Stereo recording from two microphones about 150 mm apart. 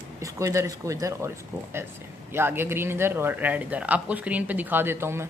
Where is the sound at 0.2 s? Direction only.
20° right (ahead or behind).